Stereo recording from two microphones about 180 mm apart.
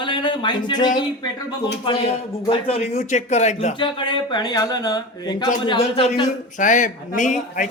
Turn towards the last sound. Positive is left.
turn(degrees=45)  # may be behind; listen again after turning